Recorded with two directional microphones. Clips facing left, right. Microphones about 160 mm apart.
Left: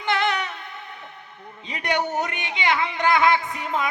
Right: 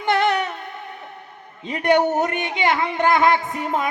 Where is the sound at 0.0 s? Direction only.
50° right (ahead or behind).